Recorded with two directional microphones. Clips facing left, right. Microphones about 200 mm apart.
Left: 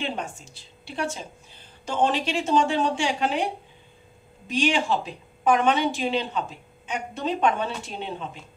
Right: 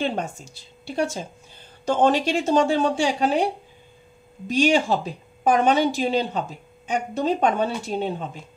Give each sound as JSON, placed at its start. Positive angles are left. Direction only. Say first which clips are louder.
{"t": 0.0, "sound": "speech", "louder": "right 5 dB", "side_deg": -40}
{"t": 4.5, "sound": "speech", "louder": "right 4 dB", "side_deg": -40}